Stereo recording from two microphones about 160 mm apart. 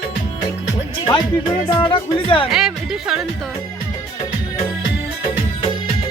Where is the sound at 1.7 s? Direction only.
30° left (ahead or behind).